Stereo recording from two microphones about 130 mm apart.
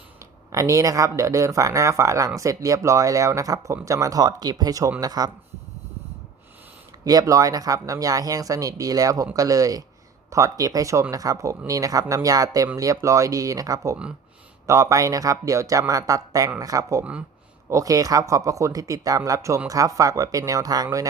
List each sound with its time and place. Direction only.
0.5 s speech: 25° right (ahead or behind)
7.0 s speech: 30° right (ahead or behind)
17.0 s speech: 10° right (ahead or behind)
17.7 s speech: 25° right (ahead or behind)